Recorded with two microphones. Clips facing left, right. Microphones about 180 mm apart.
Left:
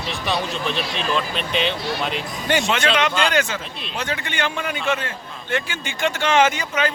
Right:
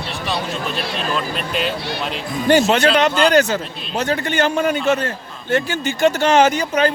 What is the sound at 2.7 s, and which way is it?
A man's voice, 35° right (ahead or behind).